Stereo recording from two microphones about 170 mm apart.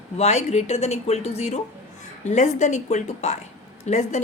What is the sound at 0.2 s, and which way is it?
A woman's voice, 40° left (ahead or behind).